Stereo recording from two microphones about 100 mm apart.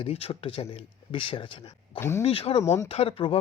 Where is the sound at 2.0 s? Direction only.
25° left (ahead or behind).